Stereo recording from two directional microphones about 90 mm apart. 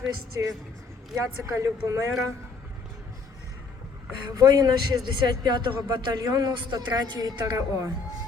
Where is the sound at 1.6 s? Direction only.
35° right (ahead or behind).